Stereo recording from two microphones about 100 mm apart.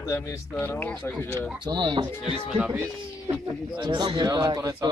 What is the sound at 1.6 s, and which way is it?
Speech, 50° right (ahead or behind).